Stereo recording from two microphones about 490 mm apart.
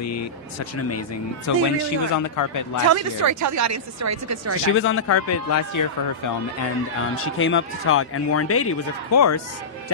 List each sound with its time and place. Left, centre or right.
0.0 s speech: left
2.9 s speech: right
4.7 s speech: left
7.3 s a man's voice: left